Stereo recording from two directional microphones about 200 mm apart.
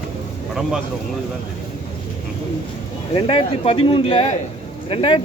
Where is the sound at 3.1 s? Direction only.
25° left (ahead or behind).